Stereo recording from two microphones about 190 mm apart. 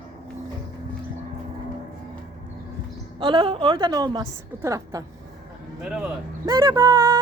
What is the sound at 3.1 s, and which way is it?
Speech, 25° right (ahead or behind).